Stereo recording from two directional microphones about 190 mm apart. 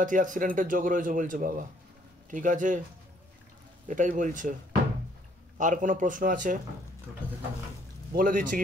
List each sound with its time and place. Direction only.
0.0 s speech: 45° right (ahead or behind)
3.8 s speech: 40° right (ahead or behind)
5.6 s speech: 40° right (ahead or behind)
8.1 s speech: 45° right (ahead or behind)